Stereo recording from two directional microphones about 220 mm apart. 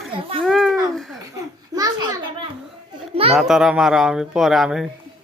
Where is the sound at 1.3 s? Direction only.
15° right (ahead or behind).